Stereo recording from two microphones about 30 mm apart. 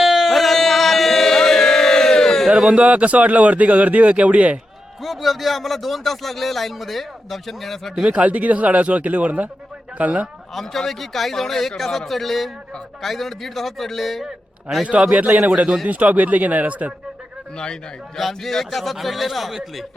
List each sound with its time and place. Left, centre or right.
0.0 s a sound: centre
0.3 s a sound: centre
2.5 s a sound: right
2.7 s a man's voice: right
5.0 s speech: centre
8.2 s a man's voice: right
10.5 s speech: centre
15.1 s speech: right
18.2 s speech: centre